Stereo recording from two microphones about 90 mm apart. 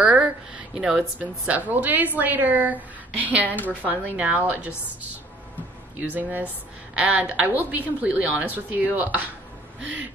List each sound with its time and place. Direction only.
0.0 s a sound: 10° right (ahead or behind)
1.2 s a woman's voice: 15° right (ahead or behind)
3.4 s a woman's voice: 20° left (ahead or behind)
3.9 s a woman's voice: 15° right (ahead or behind)
5.9 s a woman's voice: 15° right (ahead or behind)